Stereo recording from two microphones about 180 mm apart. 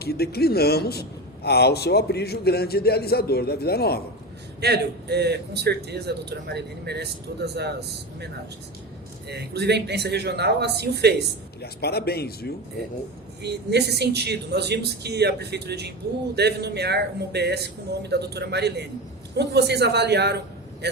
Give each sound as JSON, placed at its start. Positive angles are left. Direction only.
{"t": 0.0, "sound": "a man's voice", "side_deg": 60}
{"t": 4.6, "sound": "speech", "side_deg": -65}
{"t": 9.3, "sound": "speech", "side_deg": -65}
{"t": 11.6, "sound": "a man's voice", "side_deg": 60}
{"t": 13.4, "sound": "speech", "side_deg": -65}